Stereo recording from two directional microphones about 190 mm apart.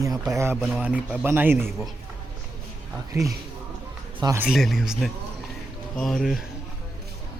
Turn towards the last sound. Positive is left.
turn(degrees=0)  # may be behind; listen again after turning